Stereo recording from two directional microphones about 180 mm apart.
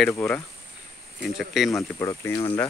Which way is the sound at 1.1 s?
Centre (ahead or behind).